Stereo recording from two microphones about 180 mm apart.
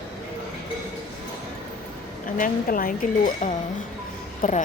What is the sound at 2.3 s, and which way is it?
A woman's voice, 50° left (ahead or behind).